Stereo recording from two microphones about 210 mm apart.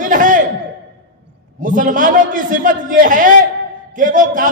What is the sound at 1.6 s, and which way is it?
A man's voice, 40° right (ahead or behind).